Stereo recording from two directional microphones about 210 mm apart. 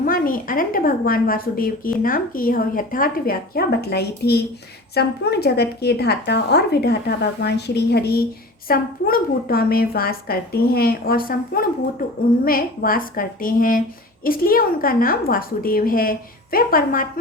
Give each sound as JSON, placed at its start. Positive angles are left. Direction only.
{"t": 0.0, "sound": "a woman's voice", "side_deg": 40}